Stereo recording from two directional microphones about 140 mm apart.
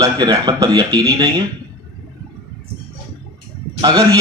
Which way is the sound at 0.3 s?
35° right (ahead or behind).